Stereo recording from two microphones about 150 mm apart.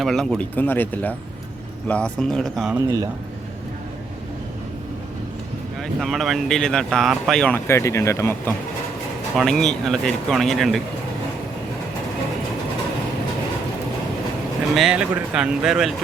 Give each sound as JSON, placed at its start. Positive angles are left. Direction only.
{"t": 0.0, "sound": "speech", "side_deg": 0}
{"t": 2.7, "sound": "a man's voice", "side_deg": -25}
{"t": 6.0, "sound": "speech", "side_deg": 0}
{"t": 9.4, "sound": "speech", "side_deg": 5}
{"t": 14.8, "sound": "speech", "side_deg": -5}